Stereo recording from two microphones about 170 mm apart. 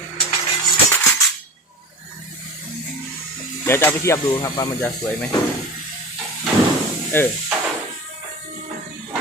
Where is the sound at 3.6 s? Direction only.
15° left (ahead or behind).